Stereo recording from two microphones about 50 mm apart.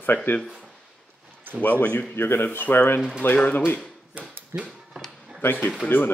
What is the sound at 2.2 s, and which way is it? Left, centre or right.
Speech, left.